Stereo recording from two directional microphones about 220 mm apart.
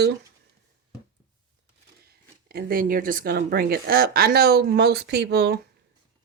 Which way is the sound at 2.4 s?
45° right (ahead or behind).